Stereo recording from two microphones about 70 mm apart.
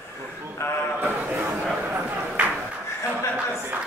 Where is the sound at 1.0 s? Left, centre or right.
Right.